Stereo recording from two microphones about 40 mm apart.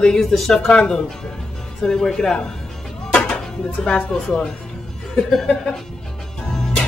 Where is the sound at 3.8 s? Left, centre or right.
Left.